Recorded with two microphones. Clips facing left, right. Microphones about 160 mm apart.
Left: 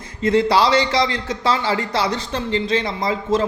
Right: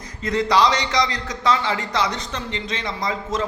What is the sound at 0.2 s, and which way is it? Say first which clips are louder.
A man's voice: left 3 dB; 30° left (ahead or behind).